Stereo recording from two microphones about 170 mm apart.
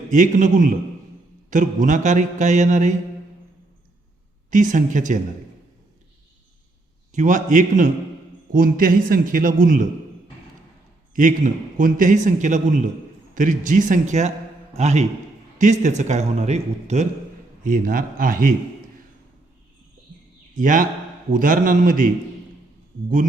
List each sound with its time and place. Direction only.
0.1 s a man's voice: 50° right (ahead or behind)
4.5 s a man's voice: 50° right (ahead or behind)
7.1 s a man's voice: 45° right (ahead or behind)
11.1 s a man's voice: 50° right (ahead or behind)
17.6 s a man's voice: 50° right (ahead or behind)
20.6 s a man's voice: 50° right (ahead or behind)